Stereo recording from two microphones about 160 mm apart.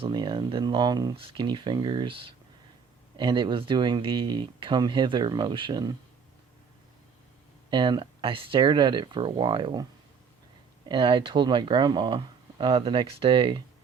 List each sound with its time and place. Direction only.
0.0 s speech: 30° right (ahead or behind)
7.7 s speech: 30° right (ahead or behind)
10.8 s speech: 30° right (ahead or behind)